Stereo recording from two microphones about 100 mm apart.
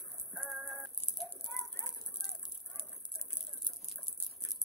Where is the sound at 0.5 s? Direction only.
Centre (ahead or behind).